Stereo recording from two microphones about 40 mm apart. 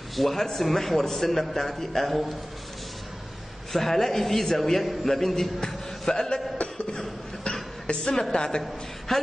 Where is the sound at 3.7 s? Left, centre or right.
Centre.